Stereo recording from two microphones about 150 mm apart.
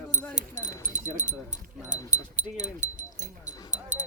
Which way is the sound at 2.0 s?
55° right (ahead or behind).